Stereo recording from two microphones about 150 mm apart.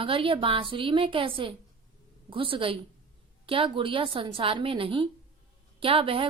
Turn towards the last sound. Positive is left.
turn(degrees=-35)  # may be behind; listen again after turning